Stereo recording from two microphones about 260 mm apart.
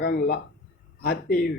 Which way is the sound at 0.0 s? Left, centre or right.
Left.